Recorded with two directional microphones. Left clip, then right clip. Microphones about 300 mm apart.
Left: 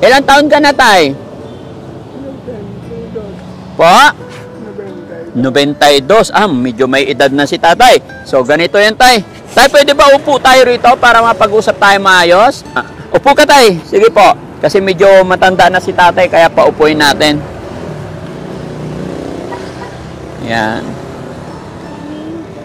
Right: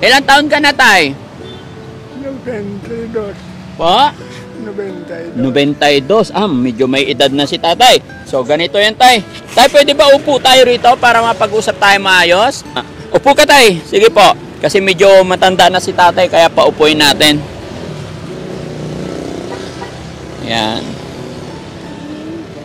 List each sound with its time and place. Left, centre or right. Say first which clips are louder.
0.0 s speech: left 2 dB; centre
3.7 s speech: left 5 dB; left
5.4 s a man's voice: left 3 dB; left; by 17.4 s centre
20.4 s speech: left 2 dB; centre